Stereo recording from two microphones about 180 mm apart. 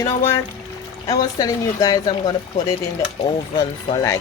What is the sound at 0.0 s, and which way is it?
Speech, 15° left (ahead or behind).